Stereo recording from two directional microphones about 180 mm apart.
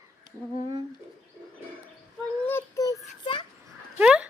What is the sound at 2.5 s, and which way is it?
Child singing, 15° left (ahead or behind).